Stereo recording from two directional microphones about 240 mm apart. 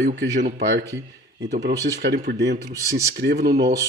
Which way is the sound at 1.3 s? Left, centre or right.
Right.